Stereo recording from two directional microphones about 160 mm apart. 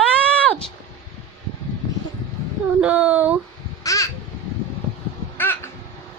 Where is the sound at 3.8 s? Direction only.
20° left (ahead or behind).